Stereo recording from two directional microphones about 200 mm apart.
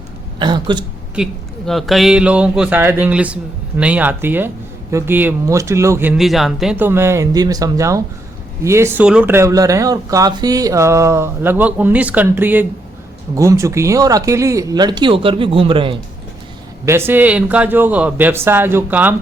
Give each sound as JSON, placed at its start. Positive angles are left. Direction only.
{"t": 0.3, "sound": "speech", "side_deg": -20}
{"t": 1.1, "sound": "speech", "side_deg": 0}
{"t": 16.8, "sound": "speech", "side_deg": -10}